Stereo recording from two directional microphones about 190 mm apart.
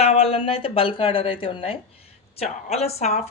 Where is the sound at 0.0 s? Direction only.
30° left (ahead or behind).